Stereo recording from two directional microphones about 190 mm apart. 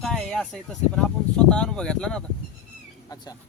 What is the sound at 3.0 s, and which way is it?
Speech, 20° left (ahead or behind).